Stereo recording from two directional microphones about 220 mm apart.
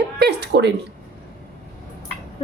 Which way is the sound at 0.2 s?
50° right (ahead or behind).